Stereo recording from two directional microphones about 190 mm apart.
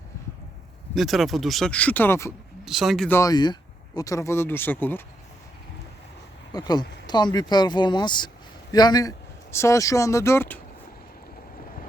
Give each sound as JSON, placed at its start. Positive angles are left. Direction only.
{"t": 0.9, "sound": "speech", "side_deg": 0}
{"t": 2.6, "sound": "speech", "side_deg": 0}
{"t": 3.1, "sound": "speech", "side_deg": 15}
{"t": 6.5, "sound": "speech", "side_deg": 20}